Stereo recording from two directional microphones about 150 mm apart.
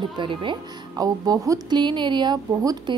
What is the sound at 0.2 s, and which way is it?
A woman's voice, 35° right (ahead or behind).